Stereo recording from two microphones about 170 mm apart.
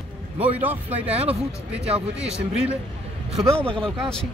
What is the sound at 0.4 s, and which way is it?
Speech, 10° right (ahead or behind).